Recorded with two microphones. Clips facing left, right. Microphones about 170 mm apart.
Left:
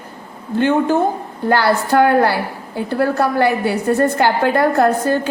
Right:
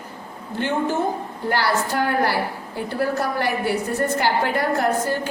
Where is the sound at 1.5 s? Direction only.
60° left (ahead or behind).